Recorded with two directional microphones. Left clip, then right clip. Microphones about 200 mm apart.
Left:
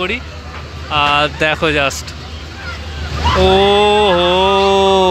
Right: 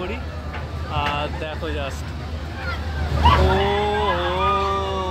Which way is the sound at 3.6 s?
25° left (ahead or behind).